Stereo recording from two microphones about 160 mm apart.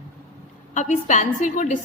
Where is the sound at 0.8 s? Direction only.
50° left (ahead or behind).